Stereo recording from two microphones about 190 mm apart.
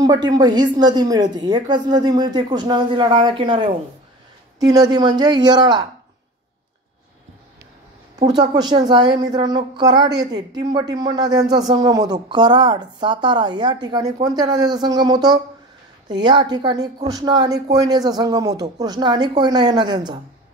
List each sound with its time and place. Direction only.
0.0 s a woman's voice: 20° right (ahead or behind)
8.2 s a woman's voice: 20° right (ahead or behind)